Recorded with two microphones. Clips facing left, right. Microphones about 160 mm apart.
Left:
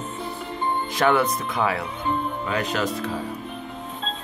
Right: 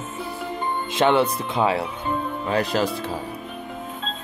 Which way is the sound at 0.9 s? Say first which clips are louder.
Right 2 dB; 25° right (ahead or behind).